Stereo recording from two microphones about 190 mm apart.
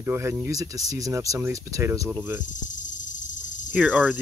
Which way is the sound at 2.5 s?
40° left (ahead or behind).